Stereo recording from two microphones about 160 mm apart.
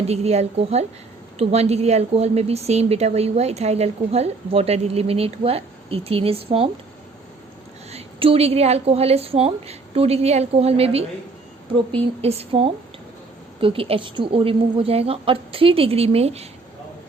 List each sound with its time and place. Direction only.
0.1 s a woman's voice: 40° right (ahead or behind)
7.9 s a woman's voice: 40° right (ahead or behind)